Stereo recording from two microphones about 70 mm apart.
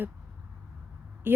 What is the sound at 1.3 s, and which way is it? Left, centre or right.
Speech, right.